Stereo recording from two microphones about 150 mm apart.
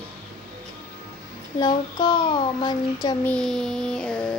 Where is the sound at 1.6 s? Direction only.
30° left (ahead or behind).